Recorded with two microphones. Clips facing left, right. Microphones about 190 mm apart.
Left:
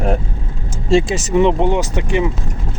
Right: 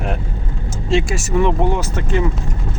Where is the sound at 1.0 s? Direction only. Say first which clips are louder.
Left 4 dB; 20° left (ahead or behind).